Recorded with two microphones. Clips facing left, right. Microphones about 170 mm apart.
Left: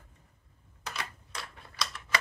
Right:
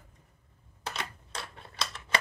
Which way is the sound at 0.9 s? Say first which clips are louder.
Right 2 dB; 25° right (ahead or behind).